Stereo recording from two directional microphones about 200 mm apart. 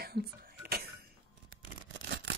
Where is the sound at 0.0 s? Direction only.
50° right (ahead or behind).